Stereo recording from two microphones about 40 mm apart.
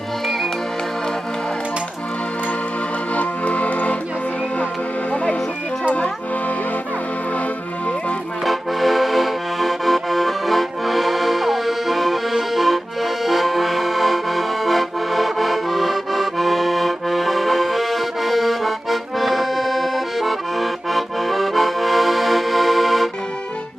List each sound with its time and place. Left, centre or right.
3.2 s music: left
5.1 s music: left
8.4 s accordion: centre